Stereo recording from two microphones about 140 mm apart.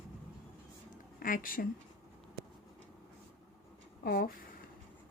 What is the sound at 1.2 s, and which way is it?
Speech, 75° left (ahead or behind).